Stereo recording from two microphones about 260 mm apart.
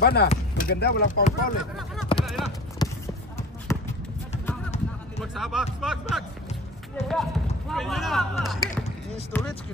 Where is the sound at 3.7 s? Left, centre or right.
Centre.